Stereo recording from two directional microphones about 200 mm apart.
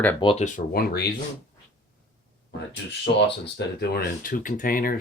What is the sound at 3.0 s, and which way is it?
Speech, 55° left (ahead or behind).